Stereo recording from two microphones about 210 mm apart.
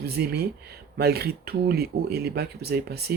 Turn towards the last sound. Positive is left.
turn(degrees=-50)  # may be behind; listen again after turning